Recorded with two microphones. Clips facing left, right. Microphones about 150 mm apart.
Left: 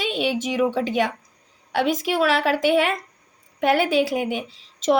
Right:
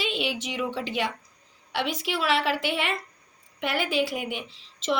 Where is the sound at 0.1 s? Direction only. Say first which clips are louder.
Left 6 dB; 45° left (ahead or behind).